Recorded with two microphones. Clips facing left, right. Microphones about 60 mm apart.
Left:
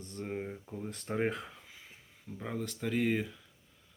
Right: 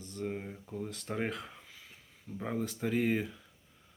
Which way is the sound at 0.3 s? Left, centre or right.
Centre.